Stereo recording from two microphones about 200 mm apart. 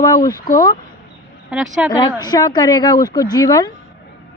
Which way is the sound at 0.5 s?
20° left (ahead or behind).